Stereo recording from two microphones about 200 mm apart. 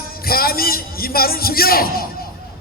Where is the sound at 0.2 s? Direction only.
50° left (ahead or behind).